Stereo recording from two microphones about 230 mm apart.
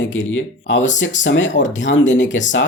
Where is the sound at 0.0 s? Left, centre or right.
Left.